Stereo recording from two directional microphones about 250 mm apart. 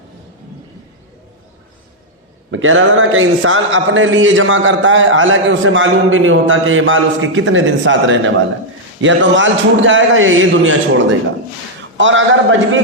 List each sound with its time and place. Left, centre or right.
2.5 s a man's voice: right
11.9 s a man's voice: right